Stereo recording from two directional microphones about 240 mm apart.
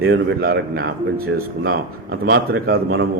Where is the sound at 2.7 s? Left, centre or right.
Right.